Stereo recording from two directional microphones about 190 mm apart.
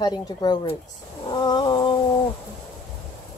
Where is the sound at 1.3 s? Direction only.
20° left (ahead or behind).